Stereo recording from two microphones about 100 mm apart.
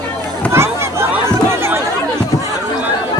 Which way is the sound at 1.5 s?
25° right (ahead or behind).